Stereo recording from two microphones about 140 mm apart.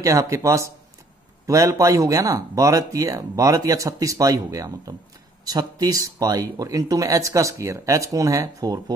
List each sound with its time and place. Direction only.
0.0 s speech: 20° right (ahead or behind)